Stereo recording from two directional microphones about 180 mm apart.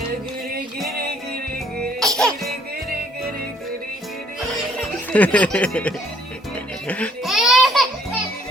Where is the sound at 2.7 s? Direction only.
60° right (ahead or behind).